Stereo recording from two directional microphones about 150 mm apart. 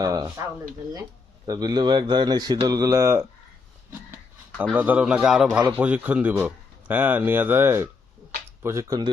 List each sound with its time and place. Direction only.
0.0 s speech: 25° right (ahead or behind)
1.5 s speech: 25° right (ahead or behind)
4.7 s a man's voice: 10° right (ahead or behind)